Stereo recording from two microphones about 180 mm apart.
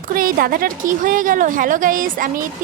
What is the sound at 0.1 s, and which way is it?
A woman's voice, 50° right (ahead or behind).